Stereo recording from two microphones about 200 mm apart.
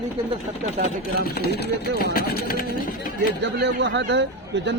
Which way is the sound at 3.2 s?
50° right (ahead or behind).